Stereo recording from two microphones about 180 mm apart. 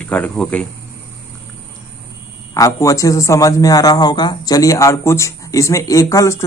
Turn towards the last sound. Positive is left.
turn(degrees=15)  # may be behind; listen again after turning